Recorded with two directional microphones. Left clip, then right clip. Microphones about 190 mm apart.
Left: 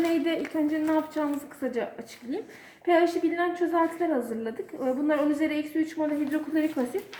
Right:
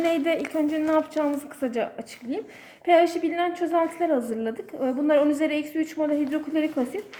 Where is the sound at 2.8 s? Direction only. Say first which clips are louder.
Right 3 dB; 45° right (ahead or behind).